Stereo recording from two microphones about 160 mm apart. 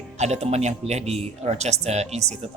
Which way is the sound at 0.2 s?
45° right (ahead or behind).